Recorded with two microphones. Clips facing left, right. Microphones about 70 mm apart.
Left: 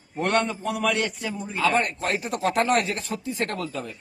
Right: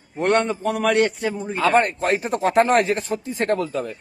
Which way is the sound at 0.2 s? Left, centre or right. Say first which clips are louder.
Right 4 dB; right.